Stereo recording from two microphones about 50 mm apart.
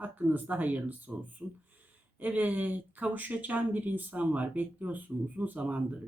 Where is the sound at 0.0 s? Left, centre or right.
Right.